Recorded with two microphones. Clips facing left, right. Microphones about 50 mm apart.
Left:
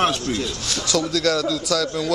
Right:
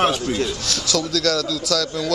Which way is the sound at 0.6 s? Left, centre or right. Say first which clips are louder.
Even; centre.